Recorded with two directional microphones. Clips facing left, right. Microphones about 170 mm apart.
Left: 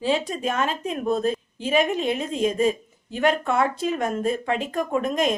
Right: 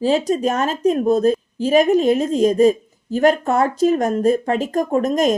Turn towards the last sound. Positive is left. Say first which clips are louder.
# right 6 dB
turn(degrees=-40)  # may be behind; listen again after turning